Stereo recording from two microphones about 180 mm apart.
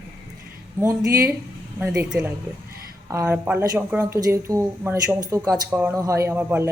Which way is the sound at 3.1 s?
15° right (ahead or behind).